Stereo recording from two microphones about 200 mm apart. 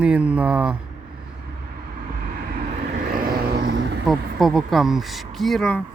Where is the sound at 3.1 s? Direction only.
50° right (ahead or behind).